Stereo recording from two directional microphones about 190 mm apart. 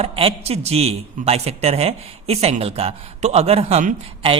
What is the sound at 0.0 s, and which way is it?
A man's voice, 30° right (ahead or behind).